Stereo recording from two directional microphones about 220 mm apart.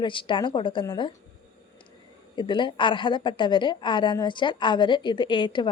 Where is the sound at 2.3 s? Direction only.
20° left (ahead or behind).